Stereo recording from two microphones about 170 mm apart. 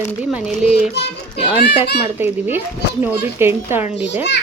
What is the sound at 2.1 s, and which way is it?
A child's voice, 10° right (ahead or behind).